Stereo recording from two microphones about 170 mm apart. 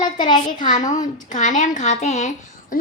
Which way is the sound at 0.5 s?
50° left (ahead or behind).